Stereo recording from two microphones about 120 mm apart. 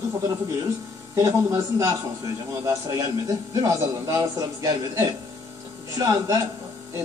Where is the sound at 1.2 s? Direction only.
25° right (ahead or behind).